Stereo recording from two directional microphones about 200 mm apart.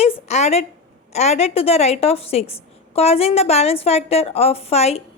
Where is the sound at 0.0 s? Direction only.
30° left (ahead or behind).